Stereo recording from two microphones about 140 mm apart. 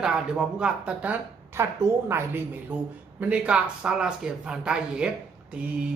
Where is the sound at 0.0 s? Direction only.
5° right (ahead or behind).